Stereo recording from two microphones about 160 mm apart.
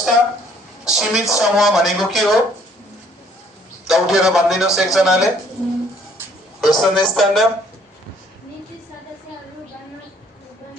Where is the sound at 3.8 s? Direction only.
Centre (ahead or behind).